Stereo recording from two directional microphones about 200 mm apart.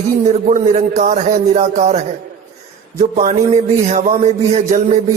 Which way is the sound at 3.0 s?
35° right (ahead or behind).